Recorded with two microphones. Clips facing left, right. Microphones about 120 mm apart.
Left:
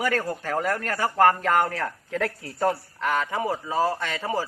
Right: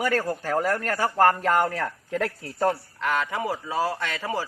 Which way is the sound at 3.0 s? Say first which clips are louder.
Left 1 dB; 15° left (ahead or behind).